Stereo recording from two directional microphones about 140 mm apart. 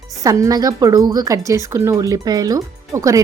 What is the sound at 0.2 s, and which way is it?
A woman's voice, 25° right (ahead or behind).